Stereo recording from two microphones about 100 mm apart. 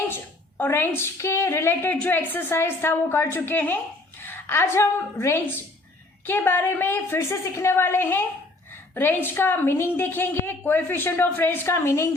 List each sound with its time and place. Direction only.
0.1 s a woman's voice: 20° left (ahead or behind)